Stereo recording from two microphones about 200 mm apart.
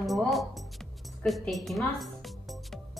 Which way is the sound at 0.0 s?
Centre (ahead or behind).